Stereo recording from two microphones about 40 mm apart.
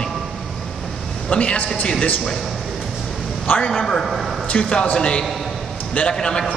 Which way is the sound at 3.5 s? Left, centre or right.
Left.